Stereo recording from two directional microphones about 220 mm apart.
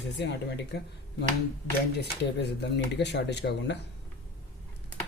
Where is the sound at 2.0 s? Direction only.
50° left (ahead or behind).